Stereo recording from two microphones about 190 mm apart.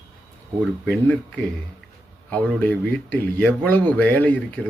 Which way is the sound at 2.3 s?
10° left (ahead or behind).